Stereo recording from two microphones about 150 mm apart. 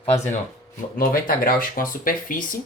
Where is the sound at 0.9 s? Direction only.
70° left (ahead or behind).